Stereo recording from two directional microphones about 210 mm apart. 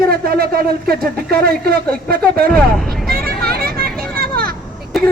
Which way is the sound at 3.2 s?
45° right (ahead or behind).